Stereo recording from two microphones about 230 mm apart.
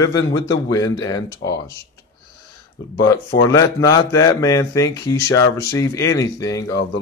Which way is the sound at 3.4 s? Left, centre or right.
Centre.